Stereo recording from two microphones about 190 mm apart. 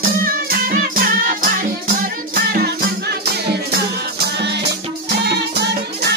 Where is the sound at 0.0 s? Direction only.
50° right (ahead or behind).